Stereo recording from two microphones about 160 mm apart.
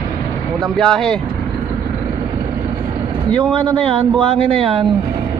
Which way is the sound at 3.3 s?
35° right (ahead or behind).